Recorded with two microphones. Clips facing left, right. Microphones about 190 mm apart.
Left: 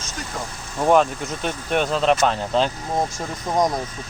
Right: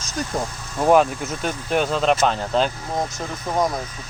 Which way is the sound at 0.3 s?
40° right (ahead or behind).